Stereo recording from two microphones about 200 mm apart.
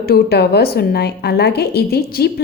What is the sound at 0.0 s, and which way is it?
A woman's voice, 50° left (ahead or behind).